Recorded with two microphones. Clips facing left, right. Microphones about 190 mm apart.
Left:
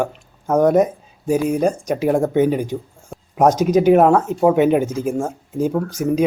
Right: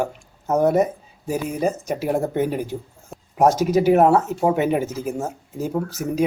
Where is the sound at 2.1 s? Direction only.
90° left.